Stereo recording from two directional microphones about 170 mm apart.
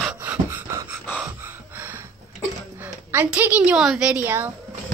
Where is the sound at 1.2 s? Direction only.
10° right (ahead or behind).